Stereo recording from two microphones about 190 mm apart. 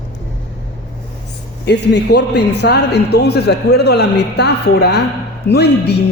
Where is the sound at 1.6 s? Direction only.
65° left (ahead or behind).